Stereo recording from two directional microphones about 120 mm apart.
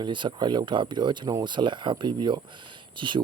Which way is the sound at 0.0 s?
40° right (ahead or behind).